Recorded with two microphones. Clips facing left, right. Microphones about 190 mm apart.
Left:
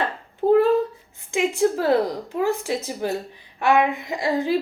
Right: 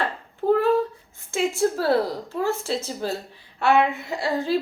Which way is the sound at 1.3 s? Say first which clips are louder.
Left 2 dB; 15° left (ahead or behind).